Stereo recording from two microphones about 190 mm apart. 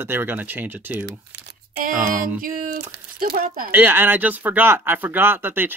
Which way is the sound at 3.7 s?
10° right (ahead or behind).